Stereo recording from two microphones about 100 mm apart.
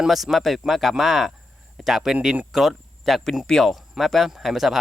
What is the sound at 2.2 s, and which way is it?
Speech, 15° right (ahead or behind).